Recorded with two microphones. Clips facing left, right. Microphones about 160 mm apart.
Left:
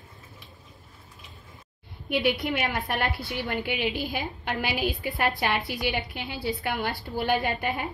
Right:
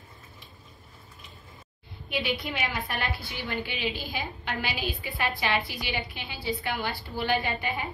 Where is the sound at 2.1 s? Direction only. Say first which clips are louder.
Left 5 dB; 60° left (ahead or behind).